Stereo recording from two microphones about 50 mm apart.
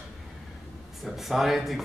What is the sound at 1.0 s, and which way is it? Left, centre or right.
Speech, centre.